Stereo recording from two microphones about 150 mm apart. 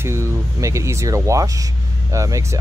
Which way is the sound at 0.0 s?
15° right (ahead or behind).